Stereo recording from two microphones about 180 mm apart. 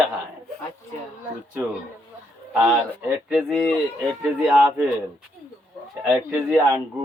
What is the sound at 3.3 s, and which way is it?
A man's voice, 5° right (ahead or behind).